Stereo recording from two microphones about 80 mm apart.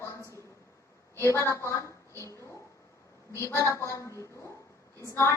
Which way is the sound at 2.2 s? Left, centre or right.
Left.